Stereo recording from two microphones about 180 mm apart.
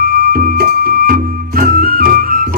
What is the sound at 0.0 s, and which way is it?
Music, 55° right (ahead or behind).